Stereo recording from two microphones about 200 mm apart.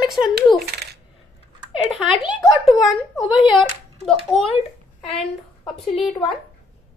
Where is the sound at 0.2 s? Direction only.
20° left (ahead or behind).